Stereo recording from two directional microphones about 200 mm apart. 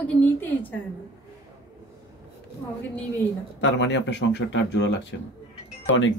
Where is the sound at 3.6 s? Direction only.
65° left (ahead or behind).